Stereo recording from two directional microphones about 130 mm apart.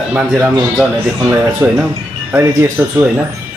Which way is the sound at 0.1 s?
10° right (ahead or behind).